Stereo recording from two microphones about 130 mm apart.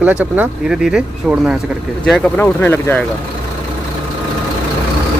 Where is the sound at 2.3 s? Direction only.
15° left (ahead or behind).